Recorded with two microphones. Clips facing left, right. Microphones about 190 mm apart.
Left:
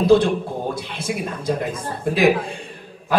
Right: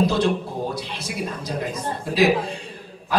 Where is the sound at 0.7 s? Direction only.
50° left (ahead or behind).